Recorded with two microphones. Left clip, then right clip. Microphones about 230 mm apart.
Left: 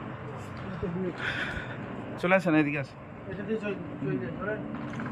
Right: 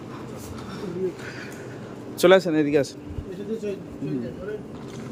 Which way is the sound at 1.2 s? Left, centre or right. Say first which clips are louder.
Left 4 dB; centre.